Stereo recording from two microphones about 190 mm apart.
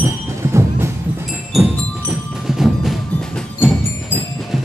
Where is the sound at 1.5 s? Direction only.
5° right (ahead or behind).